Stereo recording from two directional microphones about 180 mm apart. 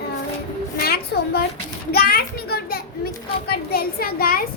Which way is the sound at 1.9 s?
60° left (ahead or behind).